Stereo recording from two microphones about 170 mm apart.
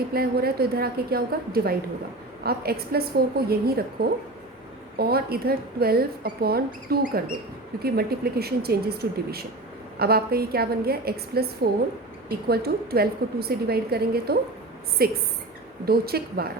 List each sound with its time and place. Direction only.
0.1 s a woman's voice: 65° right (ahead or behind)